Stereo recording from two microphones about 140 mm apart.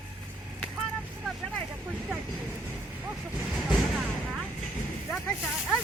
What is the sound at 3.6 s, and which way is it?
Artillery fire, centre (ahead or behind).